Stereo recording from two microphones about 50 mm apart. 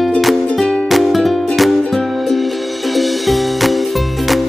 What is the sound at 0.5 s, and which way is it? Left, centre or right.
Music, centre.